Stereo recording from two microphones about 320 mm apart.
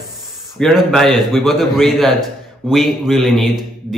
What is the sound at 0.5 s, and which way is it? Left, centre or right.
A man's voice, centre.